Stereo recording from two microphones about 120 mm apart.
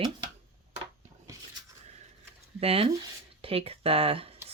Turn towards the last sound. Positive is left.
turn(degrees=-50)  # may be behind; listen again after turning